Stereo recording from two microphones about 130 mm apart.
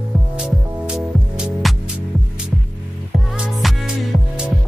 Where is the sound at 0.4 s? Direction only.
5° right (ahead or behind).